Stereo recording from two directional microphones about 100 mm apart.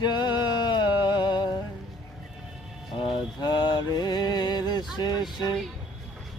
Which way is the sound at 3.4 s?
45° left (ahead or behind).